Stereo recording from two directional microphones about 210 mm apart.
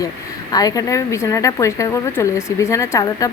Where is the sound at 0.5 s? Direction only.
15° left (ahead or behind).